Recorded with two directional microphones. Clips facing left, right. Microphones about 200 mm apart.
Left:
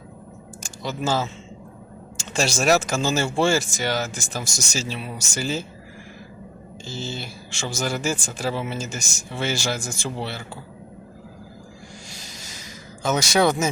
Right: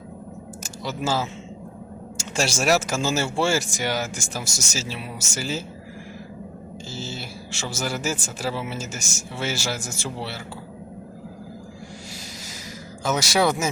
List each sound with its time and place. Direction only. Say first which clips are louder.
0.6 s speech: left 1 dB; 5° right (ahead or behind)
6.8 s speech: left 3 dB; 5° right (ahead or behind)
13.0 s speech: left 2 dB; 5° right (ahead or behind)